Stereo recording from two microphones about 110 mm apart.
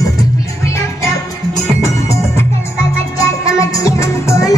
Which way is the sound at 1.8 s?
25° left (ahead or behind).